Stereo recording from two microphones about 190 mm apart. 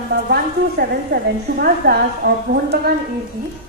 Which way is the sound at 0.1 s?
55° right (ahead or behind).